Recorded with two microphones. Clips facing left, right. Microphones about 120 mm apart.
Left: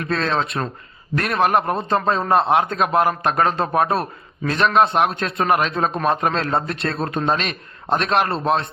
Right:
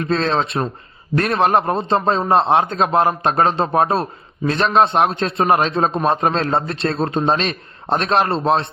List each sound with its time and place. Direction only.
0.0 s a man's voice: 25° right (ahead or behind)